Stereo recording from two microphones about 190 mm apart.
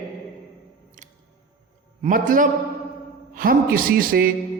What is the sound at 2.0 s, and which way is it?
A man's voice, 45° right (ahead or behind).